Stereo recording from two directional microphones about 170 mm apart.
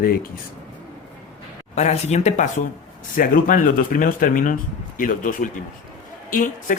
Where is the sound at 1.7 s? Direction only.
40° left (ahead or behind).